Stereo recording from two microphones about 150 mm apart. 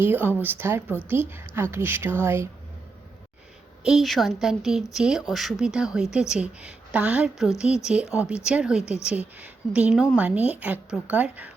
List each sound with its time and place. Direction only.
0.0 s a woman's voice: 15° right (ahead or behind)
3.8 s a woman's voice: centre (ahead or behind)